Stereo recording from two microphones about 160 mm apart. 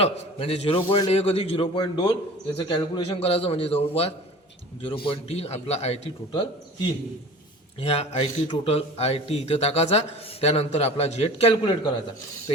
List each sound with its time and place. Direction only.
0.0 s a man's voice: 40° left (ahead or behind)
7.8 s a man's voice: 40° left (ahead or behind)